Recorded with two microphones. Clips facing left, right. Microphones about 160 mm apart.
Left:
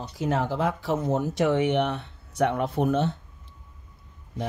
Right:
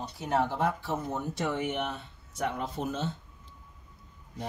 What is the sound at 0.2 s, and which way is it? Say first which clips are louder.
Speech: left 3 dB; 90° left.